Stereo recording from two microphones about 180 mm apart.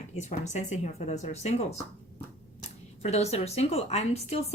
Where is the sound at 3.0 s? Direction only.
35° left (ahead or behind).